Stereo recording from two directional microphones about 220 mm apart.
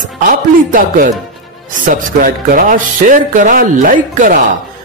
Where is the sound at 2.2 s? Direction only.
35° right (ahead or behind).